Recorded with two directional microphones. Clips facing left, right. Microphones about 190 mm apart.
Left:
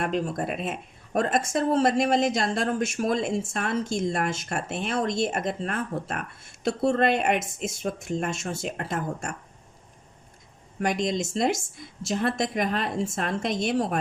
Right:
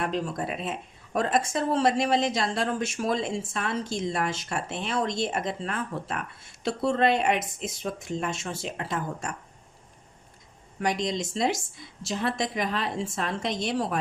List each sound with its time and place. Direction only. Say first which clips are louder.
0.0 s speech: left 2 dB; 50° left (ahead or behind)
10.8 s speech: left 2 dB; 50° left (ahead or behind)